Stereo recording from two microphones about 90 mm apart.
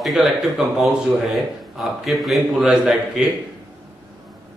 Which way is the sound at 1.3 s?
Centre (ahead or behind).